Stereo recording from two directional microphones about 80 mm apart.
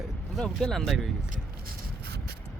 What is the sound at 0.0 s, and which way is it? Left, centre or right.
Speech, centre.